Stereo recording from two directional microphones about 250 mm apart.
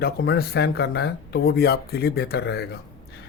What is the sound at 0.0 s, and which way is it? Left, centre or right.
Speech, left.